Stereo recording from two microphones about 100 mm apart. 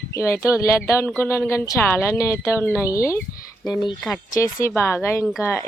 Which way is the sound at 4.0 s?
5° left (ahead or behind).